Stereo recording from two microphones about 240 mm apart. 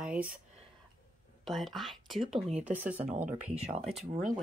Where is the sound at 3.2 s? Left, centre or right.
Right.